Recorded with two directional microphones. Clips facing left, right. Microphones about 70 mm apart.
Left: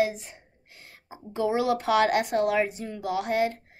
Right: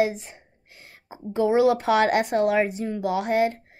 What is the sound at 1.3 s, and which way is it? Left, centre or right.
Speech, right.